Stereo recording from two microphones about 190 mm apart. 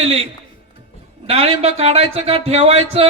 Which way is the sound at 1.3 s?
30° right (ahead or behind).